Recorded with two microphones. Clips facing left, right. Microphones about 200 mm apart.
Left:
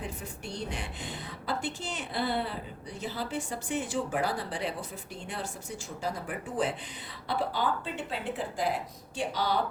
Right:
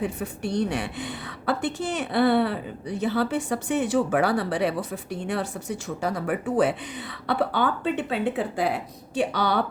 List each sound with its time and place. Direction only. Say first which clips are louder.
0.0 s a woman's voice: right 10 dB; 65° right (ahead or behind)